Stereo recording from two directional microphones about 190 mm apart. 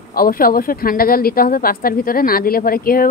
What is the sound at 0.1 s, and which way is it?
Speech, 50° left (ahead or behind).